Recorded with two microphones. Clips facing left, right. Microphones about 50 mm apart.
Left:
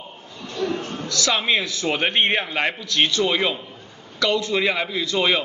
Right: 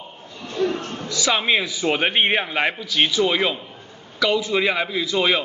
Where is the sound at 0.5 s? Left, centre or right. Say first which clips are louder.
Right 3 dB; right.